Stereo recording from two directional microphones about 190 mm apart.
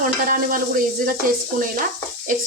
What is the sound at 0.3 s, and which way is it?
Speech, 45° right (ahead or behind).